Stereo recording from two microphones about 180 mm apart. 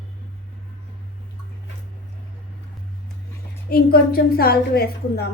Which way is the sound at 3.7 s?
55° left (ahead or behind).